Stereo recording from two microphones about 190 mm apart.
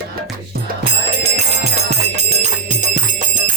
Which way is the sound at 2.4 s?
40° right (ahead or behind).